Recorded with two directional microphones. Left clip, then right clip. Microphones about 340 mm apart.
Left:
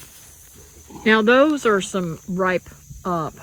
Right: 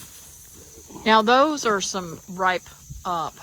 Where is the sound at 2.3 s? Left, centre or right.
Left.